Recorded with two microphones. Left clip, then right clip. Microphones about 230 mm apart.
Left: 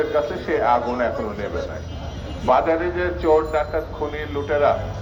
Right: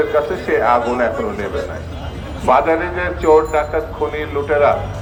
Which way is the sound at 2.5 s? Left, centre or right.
Right.